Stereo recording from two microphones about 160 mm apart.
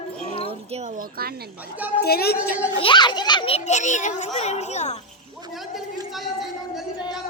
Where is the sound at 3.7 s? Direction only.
50° left (ahead or behind).